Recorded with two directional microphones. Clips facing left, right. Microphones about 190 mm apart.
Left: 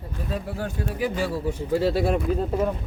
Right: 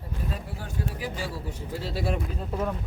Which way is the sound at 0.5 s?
65° left (ahead or behind).